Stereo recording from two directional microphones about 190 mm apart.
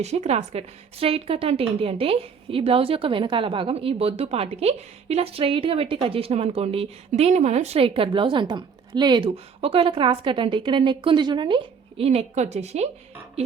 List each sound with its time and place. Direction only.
0.0 s a woman's voice: 35° right (ahead or behind)